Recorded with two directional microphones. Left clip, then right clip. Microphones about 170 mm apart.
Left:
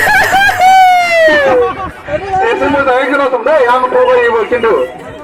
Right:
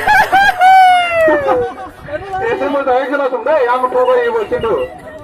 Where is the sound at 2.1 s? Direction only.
15° left (ahead or behind).